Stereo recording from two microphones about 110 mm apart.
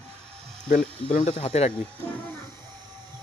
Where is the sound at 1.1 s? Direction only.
65° left (ahead or behind).